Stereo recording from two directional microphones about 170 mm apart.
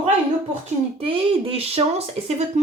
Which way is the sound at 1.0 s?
35° right (ahead or behind).